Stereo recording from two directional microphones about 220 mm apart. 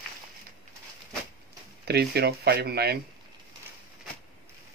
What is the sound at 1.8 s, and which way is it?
Speech, 45° right (ahead or behind).